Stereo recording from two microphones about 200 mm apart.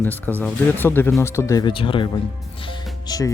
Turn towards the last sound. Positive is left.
turn(degrees=20)  # may be behind; listen again after turning